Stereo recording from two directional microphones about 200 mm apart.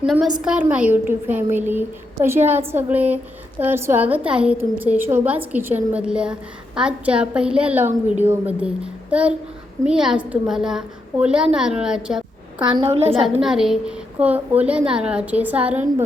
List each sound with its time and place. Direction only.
0.0 s a woman's voice: centre (ahead or behind)
12.6 s a woman's voice: 25° right (ahead or behind)
13.2 s a woman's voice: centre (ahead or behind)